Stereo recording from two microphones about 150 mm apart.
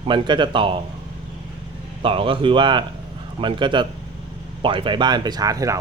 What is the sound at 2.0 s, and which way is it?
Speech, 35° right (ahead or behind).